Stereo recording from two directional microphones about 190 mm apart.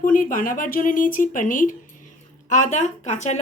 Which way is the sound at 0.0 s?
45° left (ahead or behind).